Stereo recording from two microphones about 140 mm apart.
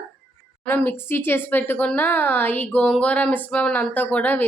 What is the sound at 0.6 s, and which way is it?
A woman's voice, 10° left (ahead or behind).